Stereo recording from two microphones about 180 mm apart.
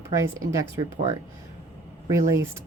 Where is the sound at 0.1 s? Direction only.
15° right (ahead or behind).